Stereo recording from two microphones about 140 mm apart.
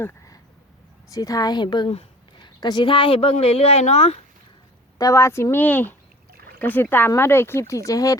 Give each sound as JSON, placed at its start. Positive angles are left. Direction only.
{"t": 0.0, "sound": "a sound", "side_deg": 15}
{"t": 1.1, "sound": "speech", "side_deg": 25}
{"t": 4.9, "sound": "speech", "side_deg": 20}